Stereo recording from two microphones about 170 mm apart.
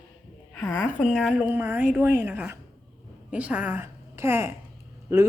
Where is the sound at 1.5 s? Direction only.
10° right (ahead or behind).